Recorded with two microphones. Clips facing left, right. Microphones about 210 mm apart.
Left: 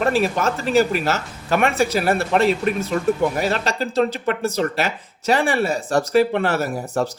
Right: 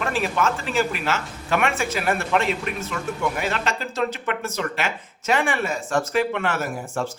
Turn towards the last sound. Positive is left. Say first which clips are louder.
# left 5 dB
turn(degrees=35)  # may be behind; listen again after turning